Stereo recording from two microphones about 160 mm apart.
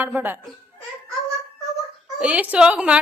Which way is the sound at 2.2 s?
10° right (ahead or behind).